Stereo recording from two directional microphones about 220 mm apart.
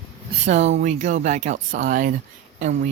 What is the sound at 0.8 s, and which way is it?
Speech, 35° right (ahead or behind).